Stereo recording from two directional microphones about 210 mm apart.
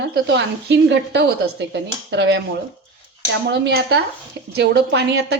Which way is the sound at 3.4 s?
55° right (ahead or behind).